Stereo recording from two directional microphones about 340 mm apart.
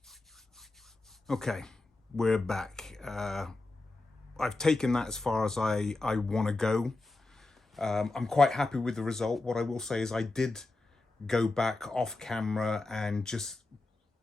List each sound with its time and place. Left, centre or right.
0.0 s rub: centre
4.4 s speech: centre